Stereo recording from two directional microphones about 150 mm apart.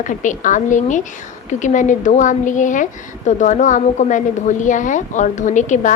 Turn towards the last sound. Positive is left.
turn(degrees=55)  # may be behind; listen again after turning